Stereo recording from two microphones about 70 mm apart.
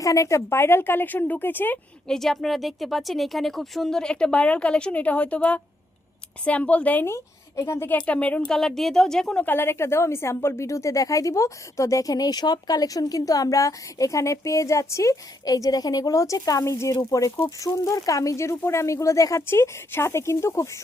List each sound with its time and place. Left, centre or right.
0.0 s a woman's voice: left
2.0 s a woman's voice: centre; by 7.0 s left
7.0 s a woman's voice: left
7.9 s speech: centre
9.4 s a woman's voice: left
16.7 s a woman's voice: left
19.5 s a woman's voice: left